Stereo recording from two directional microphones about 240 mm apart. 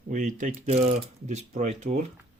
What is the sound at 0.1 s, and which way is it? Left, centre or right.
Speech, right.